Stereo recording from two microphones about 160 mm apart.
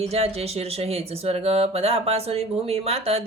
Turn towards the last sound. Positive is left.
turn(degrees=-40)  # may be behind; listen again after turning